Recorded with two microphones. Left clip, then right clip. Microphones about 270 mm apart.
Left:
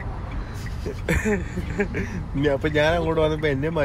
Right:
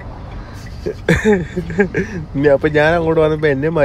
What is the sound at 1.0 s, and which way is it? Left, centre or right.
Speech, right.